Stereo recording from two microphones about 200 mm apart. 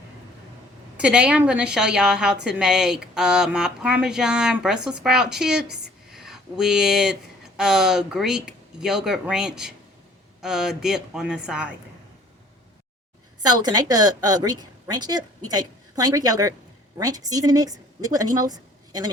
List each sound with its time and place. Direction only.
0.9 s a woman's voice: 5° right (ahead or behind)
13.4 s a woman's voice: 20° right (ahead or behind)